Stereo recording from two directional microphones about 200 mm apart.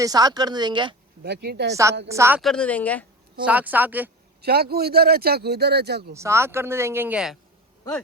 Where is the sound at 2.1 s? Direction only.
15° right (ahead or behind).